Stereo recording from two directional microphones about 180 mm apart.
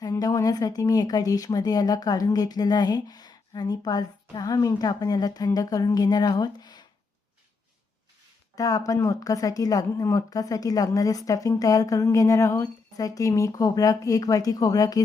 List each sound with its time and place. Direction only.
0.0 s speech: 20° left (ahead or behind)
8.5 s speech: 20° left (ahead or behind)